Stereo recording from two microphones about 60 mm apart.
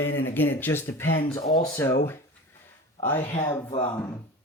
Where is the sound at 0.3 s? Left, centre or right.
Left.